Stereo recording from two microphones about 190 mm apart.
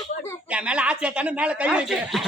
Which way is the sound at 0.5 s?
5° right (ahead or behind).